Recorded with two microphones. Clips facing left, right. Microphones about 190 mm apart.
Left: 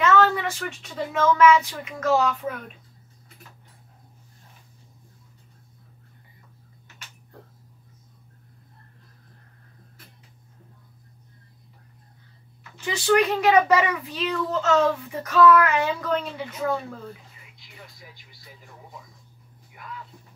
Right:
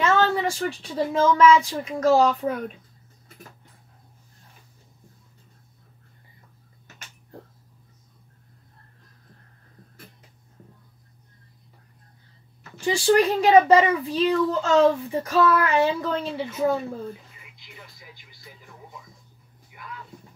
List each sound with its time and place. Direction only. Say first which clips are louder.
0.0 s speech: left 1 dB; 30° right (ahead or behind)
12.8 s a child's voice: right 2 dB; 30° right (ahead or behind)